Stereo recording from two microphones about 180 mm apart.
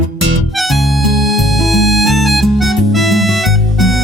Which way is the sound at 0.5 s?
Centre (ahead or behind).